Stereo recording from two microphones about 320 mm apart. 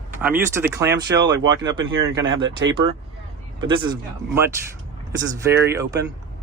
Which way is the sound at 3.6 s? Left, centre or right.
Centre.